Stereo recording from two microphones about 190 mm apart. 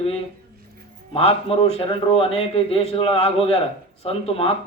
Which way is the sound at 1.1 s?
30° left (ahead or behind).